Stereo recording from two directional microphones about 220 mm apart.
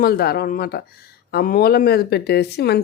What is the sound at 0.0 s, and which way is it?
Speech, 45° left (ahead or behind).